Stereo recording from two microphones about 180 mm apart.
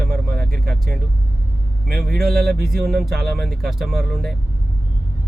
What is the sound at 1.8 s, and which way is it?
Speech, 60° right (ahead or behind).